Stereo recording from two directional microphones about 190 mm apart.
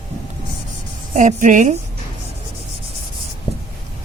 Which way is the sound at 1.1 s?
40° right (ahead or behind).